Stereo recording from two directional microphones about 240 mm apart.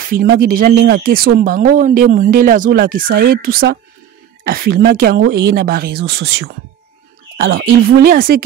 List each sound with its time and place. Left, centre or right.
0.3 s speech: right